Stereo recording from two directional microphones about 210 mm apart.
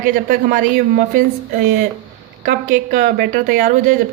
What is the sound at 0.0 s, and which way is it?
A woman's voice, 45° right (ahead or behind).